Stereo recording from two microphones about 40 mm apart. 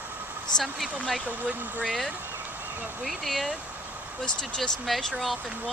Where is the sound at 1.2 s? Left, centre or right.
Right.